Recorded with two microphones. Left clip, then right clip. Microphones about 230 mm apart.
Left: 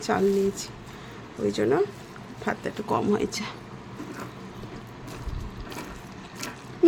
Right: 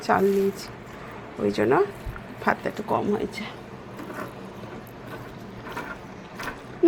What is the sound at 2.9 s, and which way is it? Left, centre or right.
Speech, left.